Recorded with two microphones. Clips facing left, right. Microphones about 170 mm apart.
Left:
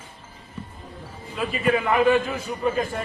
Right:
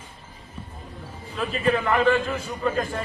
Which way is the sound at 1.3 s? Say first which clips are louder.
Left 1 dB; 10° left (ahead or behind).